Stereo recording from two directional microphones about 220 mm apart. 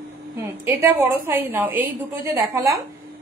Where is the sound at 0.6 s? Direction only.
10° right (ahead or behind).